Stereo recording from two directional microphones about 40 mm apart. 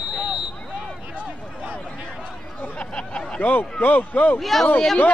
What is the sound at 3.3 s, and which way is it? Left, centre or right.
A man's voice, left.